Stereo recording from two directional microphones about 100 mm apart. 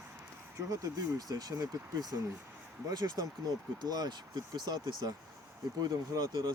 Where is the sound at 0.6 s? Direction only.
35° right (ahead or behind).